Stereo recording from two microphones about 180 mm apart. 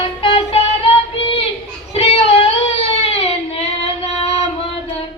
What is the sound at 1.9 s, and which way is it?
Child singing, 35° left (ahead or behind).